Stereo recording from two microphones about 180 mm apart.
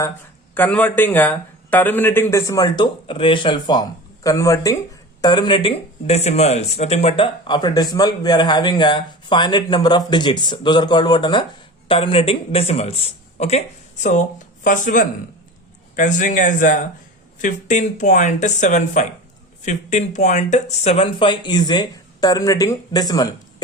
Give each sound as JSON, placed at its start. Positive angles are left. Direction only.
{"t": 0.5, "sound": "speech", "side_deg": 10}